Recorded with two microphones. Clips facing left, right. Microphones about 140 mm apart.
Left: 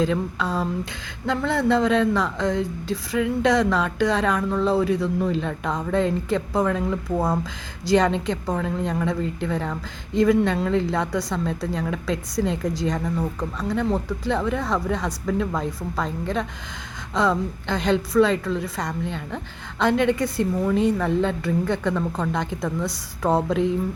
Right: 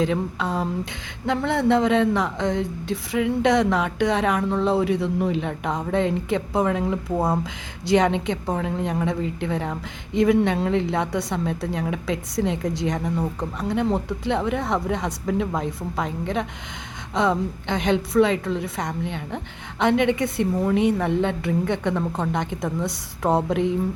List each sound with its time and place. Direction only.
0.3 s speech: 20° right (ahead or behind)
17.2 s speech: 25° right (ahead or behind)